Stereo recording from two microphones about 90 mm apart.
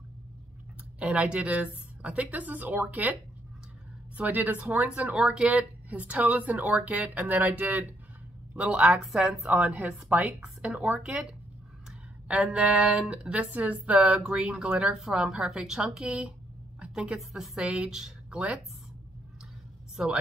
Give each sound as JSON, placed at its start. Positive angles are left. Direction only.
{"t": 0.9, "sound": "a woman's voice", "side_deg": -15}
{"t": 4.2, "sound": "speech", "side_deg": -20}
{"t": 9.5, "sound": "speech", "side_deg": -15}
{"t": 12.3, "sound": "speech", "side_deg": -15}
{"t": 20.0, "sound": "speech", "side_deg": -10}